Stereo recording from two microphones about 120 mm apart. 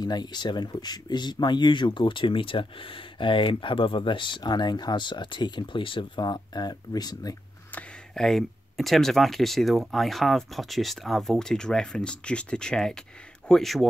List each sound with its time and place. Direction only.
0.0 s speech: 35° left (ahead or behind)
7.7 s speech: 5° left (ahead or behind)